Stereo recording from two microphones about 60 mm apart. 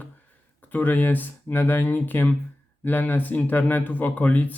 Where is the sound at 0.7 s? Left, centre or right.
Left.